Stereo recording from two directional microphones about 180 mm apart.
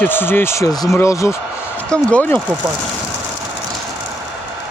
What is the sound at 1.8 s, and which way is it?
Speech, 5° left (ahead or behind).